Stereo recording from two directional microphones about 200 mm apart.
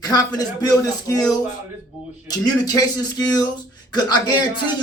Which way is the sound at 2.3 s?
20° left (ahead or behind).